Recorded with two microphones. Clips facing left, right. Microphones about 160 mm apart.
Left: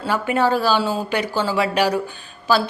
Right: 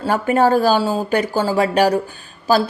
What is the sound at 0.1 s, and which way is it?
A woman's voice, 45° right (ahead or behind).